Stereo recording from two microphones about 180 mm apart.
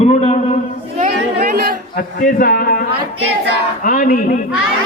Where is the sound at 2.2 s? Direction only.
50° left (ahead or behind).